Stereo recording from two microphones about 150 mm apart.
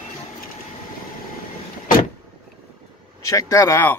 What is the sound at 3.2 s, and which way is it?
Speech, 20° left (ahead or behind).